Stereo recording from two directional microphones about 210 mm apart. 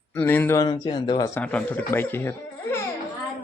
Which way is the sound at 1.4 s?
5° left (ahead or behind).